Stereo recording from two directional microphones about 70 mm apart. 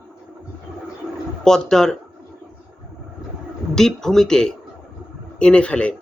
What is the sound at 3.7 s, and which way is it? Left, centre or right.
Speech, centre.